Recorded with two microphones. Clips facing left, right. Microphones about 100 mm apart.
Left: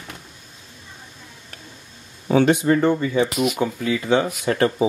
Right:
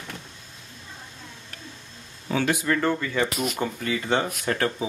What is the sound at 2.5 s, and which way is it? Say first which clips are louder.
Speech: left 6 dB; 25° left (ahead or behind).